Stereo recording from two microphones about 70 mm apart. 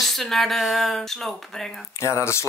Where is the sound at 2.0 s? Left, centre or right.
Left.